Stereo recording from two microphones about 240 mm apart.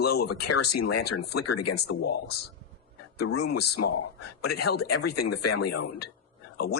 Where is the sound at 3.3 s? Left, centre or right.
Left.